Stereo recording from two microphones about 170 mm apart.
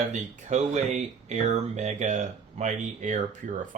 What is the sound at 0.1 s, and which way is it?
Speech, 45° right (ahead or behind).